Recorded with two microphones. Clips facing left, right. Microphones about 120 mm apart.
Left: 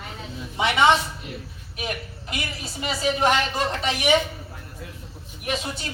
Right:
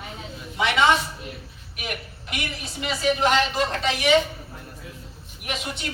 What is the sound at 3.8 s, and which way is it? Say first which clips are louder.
Speech: right 1 dB; 20° left (ahead or behind).